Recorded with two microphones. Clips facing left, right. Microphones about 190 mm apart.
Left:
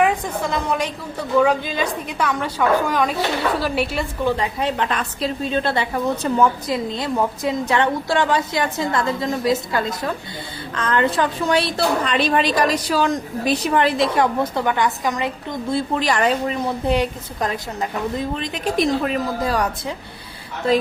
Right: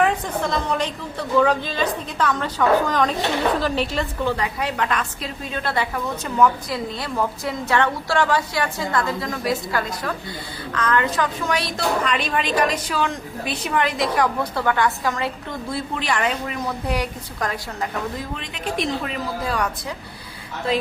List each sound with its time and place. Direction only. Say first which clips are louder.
0.0 s a woman's voice: left 1 dB; 10° left (ahead or behind)
4.6 s a woman's voice: left 2 dB; 30° left (ahead or behind)
16.0 s a woman's voice: left 3 dB; 40° left (ahead or behind); by 18.3 s 20° left (ahead or behind)
18.3 s a woman's voice: left 5 dB; 40° left (ahead or behind)